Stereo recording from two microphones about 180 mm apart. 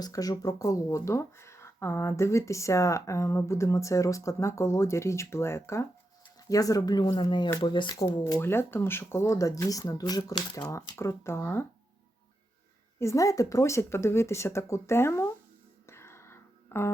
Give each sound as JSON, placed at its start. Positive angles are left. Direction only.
{"t": 0.0, "sound": "speech", "side_deg": 20}
{"t": 8.3, "sound": "speech", "side_deg": 15}
{"t": 13.0, "sound": "speech", "side_deg": 15}
{"t": 15.9, "sound": "whispering", "side_deg": 15}